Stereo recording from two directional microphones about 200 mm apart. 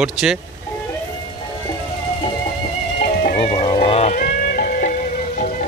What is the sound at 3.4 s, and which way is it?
Music, 30° left (ahead or behind).